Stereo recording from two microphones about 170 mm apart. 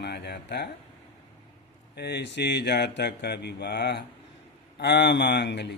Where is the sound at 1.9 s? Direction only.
80° left.